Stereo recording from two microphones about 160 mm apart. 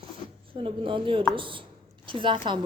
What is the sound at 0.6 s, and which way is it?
A woman's voice, 35° right (ahead or behind).